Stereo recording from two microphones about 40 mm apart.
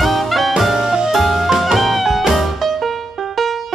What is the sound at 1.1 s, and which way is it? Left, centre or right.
Music, centre.